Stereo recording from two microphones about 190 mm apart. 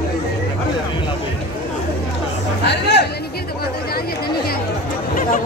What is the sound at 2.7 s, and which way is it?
Music, 65° left (ahead or behind).